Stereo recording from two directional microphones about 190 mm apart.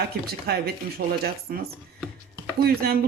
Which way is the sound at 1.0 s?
55° right (ahead or behind).